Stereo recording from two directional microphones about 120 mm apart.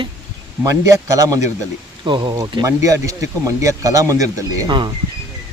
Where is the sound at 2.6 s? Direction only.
25° right (ahead or behind).